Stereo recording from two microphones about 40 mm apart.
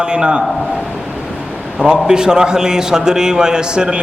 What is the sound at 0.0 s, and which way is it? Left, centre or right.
Speech, right.